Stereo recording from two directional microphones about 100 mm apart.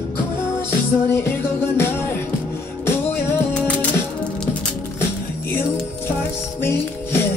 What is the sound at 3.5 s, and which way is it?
Music, 15° left (ahead or behind).